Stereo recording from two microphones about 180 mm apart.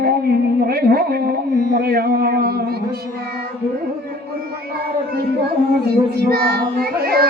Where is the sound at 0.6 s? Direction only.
60° right (ahead or behind).